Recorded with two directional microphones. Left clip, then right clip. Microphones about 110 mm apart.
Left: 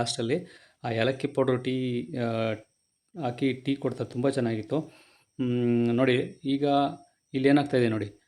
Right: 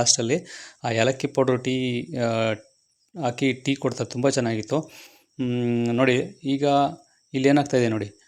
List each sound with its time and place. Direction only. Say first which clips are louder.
0.0 s speech: right 6 dB; 30° right (ahead or behind)
4.9 s speech: right 8 dB; 15° right (ahead or behind)